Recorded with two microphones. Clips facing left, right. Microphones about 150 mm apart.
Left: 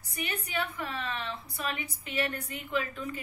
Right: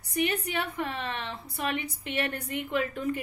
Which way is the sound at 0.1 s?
65° right (ahead or behind).